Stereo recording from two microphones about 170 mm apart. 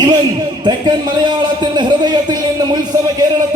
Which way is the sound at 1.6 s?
25° right (ahead or behind).